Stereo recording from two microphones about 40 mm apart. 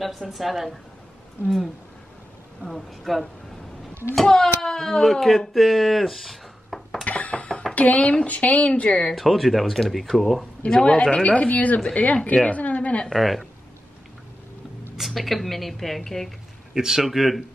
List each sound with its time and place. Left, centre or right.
0.3 s speech: centre
2.6 s speech: centre
4.3 s speech: centre
5.5 s a sound: centre
7.1 s a sound: left
7.7 s speech: left
9.1 s speech: centre
10.6 s speech: left
12.4 s a sound: left
13.1 s speech: centre
15.0 s speech: centre
16.7 s speech: centre